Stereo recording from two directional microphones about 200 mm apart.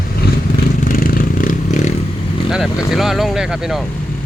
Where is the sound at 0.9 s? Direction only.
45° left (ahead or behind).